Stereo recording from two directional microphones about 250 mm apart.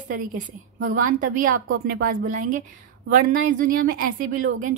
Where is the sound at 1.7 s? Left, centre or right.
Right.